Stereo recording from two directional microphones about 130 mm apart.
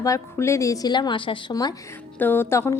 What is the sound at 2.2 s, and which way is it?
Speech, 15° left (ahead or behind).